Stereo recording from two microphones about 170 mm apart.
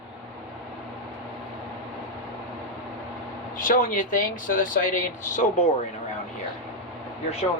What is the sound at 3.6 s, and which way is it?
Speech, 50° left (ahead or behind).